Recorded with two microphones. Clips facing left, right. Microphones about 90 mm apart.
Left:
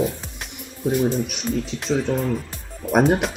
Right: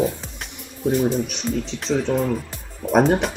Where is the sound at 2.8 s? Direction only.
5° left (ahead or behind).